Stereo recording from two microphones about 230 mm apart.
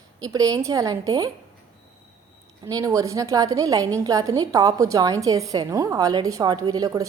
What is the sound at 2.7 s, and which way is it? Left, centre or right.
A woman's voice, centre.